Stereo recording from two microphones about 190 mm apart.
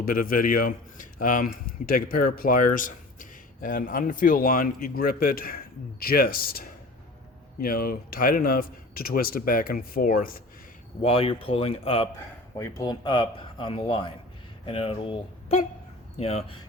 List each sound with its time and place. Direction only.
0.0 s speech: 50° left (ahead or behind)
11.0 s speech: 30° left (ahead or behind)
12.5 s speech: 15° left (ahead or behind); by 16.6 s 35° left (ahead or behind)